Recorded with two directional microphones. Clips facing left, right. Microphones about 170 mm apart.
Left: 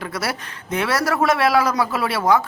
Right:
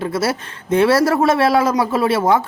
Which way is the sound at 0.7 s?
30° right (ahead or behind).